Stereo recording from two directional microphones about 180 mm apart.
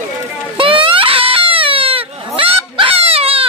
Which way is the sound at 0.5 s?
30° right (ahead or behind).